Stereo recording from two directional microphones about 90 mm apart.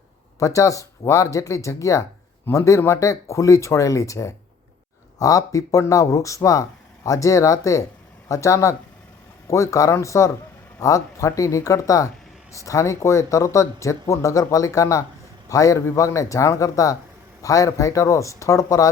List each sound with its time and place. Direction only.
0.3 s speech: 35° left (ahead or behind)